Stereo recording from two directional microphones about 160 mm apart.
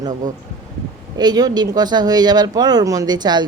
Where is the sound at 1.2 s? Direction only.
25° right (ahead or behind).